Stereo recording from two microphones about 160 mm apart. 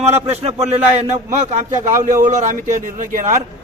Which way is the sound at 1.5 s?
50° right (ahead or behind).